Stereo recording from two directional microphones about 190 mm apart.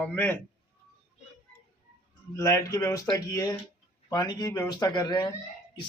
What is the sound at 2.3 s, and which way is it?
A man's voice, 15° left (ahead or behind).